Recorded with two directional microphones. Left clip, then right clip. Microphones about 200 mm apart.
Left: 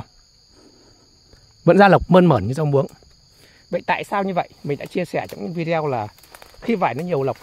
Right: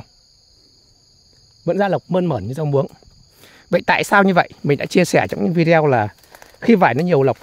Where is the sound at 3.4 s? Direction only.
35° right (ahead or behind).